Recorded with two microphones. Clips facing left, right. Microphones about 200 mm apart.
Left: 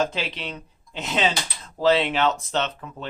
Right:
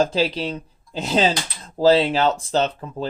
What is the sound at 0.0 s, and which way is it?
Speech, 35° right (ahead or behind).